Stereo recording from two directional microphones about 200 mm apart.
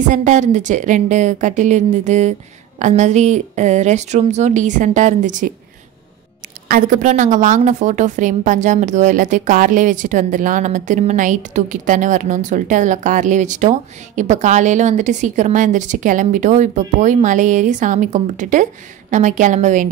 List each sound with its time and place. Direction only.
0.0 s a woman's voice: 40° right (ahead or behind)
6.7 s a woman's voice: 40° right (ahead or behind)